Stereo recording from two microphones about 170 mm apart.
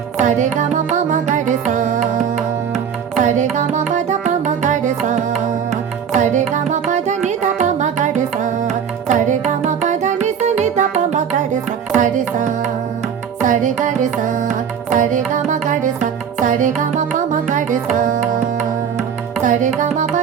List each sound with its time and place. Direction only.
0.2 s music: 45° right (ahead or behind)
18.9 s music: 50° right (ahead or behind)